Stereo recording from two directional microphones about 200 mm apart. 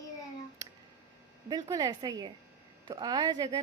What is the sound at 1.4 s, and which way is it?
A woman's voice, 20° right (ahead or behind).